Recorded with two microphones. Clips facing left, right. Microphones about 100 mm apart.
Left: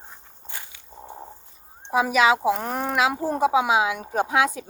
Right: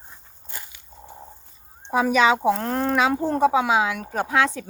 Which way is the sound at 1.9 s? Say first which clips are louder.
Right 1 dB; 5° left (ahead or behind).